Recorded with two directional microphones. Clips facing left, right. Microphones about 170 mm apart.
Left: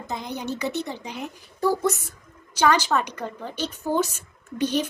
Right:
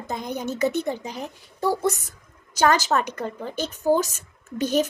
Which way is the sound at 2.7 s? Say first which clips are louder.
Left 1 dB; 45° right (ahead or behind).